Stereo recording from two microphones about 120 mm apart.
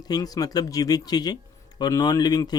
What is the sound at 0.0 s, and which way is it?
Speech, 30° left (ahead or behind).